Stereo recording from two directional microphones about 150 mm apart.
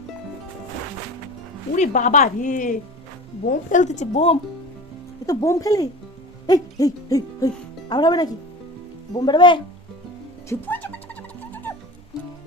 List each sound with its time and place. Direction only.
1.7 s speech: 55° left (ahead or behind)
5.2 s speech: 20° left (ahead or behind)
6.5 s hoot: 25° left (ahead or behind)
9.1 s speech: 30° left (ahead or behind)
10.5 s music: 10° left (ahead or behind)